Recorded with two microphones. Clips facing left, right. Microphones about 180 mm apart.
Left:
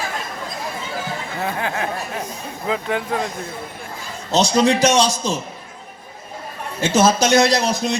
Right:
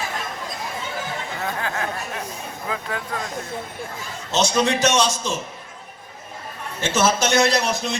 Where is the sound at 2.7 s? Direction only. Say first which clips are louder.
Left 7 dB; 20° left (ahead or behind).